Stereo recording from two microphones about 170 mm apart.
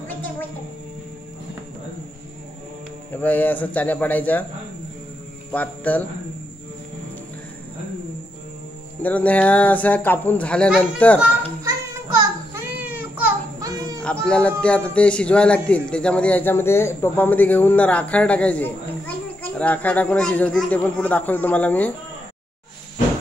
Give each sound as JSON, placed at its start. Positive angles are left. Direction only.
{"t": 3.1, "sound": "a man's voice", "side_deg": 10}
{"t": 5.5, "sound": "a man's voice", "side_deg": 10}
{"t": 9.0, "sound": "a man's voice", "side_deg": 10}
{"t": 12.2, "sound": "child singing", "side_deg": -15}
{"t": 14.0, "sound": "a man's voice", "side_deg": 5}